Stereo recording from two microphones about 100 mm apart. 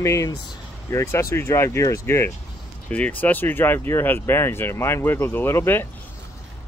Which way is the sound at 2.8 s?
15° left (ahead or behind).